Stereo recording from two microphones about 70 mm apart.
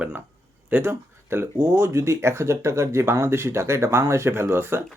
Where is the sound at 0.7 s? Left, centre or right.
Right.